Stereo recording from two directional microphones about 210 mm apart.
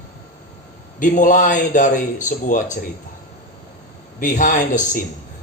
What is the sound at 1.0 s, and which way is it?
Speech, 40° left (ahead or behind).